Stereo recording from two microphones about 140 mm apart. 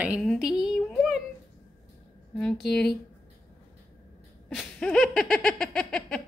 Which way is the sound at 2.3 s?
5° left (ahead or behind).